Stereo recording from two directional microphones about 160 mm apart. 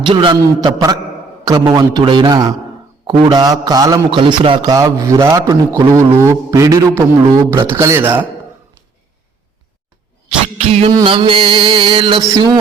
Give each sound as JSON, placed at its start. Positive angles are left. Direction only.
{"t": 0.0, "sound": "a man's voice", "side_deg": -30}
{"t": 10.2, "sound": "music", "side_deg": -40}
{"t": 11.0, "sound": "a sound", "side_deg": -35}